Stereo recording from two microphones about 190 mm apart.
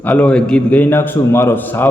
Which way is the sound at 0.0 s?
5° left (ahead or behind).